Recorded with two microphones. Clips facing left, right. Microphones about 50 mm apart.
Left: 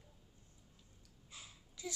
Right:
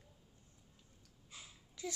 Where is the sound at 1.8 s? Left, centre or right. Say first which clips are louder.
Right 2 dB; right.